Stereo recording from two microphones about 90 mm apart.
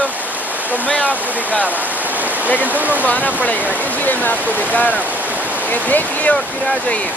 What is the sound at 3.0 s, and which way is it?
Speech, 20° left (ahead or behind).